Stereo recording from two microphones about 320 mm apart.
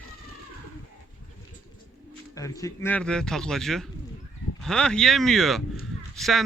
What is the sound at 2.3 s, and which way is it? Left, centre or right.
Speech, centre.